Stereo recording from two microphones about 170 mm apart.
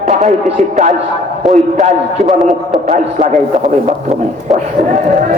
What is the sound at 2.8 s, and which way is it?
Music, 45° right (ahead or behind).